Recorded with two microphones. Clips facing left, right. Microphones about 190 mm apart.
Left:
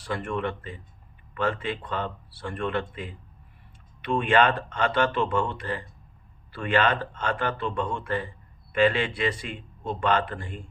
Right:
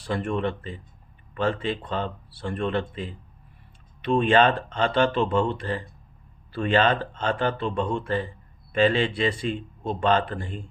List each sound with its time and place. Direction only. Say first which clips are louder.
0.0 s speech: right 3 dB; 30° right (ahead or behind)